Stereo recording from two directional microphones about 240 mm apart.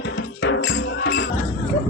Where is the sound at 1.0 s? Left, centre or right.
Left.